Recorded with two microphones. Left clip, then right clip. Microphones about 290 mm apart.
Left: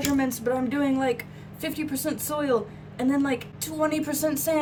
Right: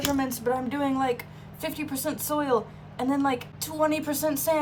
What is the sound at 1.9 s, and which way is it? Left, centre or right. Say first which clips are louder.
Speech: even; centre.